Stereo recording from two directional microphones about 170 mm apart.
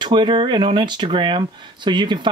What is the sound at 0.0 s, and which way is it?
Speech, 25° right (ahead or behind).